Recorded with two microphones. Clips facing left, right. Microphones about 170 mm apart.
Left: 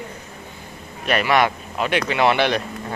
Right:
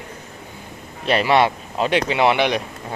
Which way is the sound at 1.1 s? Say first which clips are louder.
Right 2 dB; 25° right (ahead or behind).